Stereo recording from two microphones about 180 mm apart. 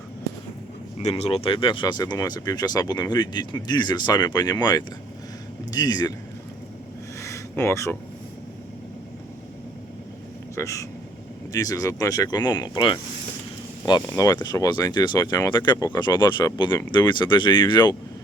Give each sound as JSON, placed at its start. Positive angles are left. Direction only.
{"t": 0.9, "sound": "speech", "side_deg": 35}
{"t": 5.7, "sound": "speech", "side_deg": 20}
{"t": 7.2, "sound": "a sound", "side_deg": 15}
{"t": 10.5, "sound": "speech", "side_deg": 15}
{"t": 14.1, "sound": "speech", "side_deg": 15}